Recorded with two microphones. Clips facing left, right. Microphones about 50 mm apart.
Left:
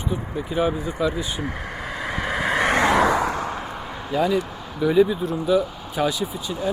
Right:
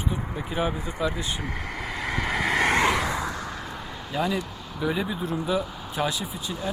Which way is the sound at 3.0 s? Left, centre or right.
Left.